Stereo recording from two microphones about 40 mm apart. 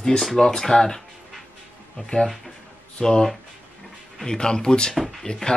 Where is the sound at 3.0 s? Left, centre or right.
Centre.